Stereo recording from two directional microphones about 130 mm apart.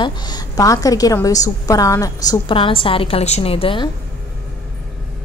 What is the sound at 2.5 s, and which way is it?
A woman's voice, 45° left (ahead or behind).